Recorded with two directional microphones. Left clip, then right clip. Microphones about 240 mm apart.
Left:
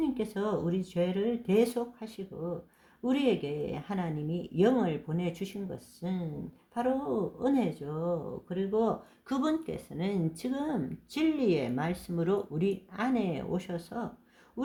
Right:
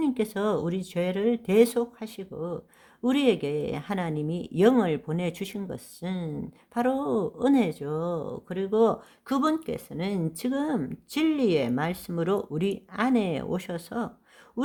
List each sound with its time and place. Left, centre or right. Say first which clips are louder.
0.0 s speech: right 5 dB; right